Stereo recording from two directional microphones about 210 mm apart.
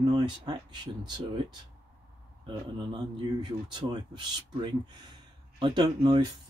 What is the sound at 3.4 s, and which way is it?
Speech, 20° right (ahead or behind).